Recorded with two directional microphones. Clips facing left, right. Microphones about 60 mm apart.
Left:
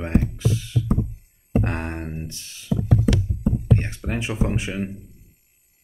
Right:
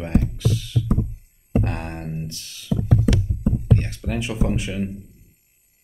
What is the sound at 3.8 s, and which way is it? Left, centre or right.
Speech, left.